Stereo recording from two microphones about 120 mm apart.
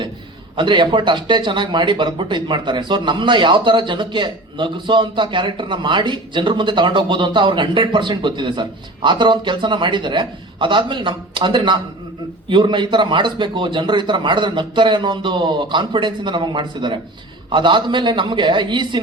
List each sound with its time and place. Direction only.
0.5 s a man's voice: 40° right (ahead or behind)